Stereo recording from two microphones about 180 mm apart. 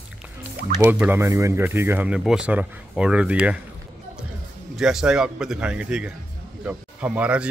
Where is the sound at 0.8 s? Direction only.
10° right (ahead or behind).